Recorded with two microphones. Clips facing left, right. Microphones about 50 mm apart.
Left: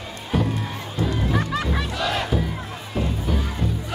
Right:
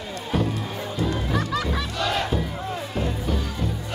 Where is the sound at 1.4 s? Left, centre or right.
Left.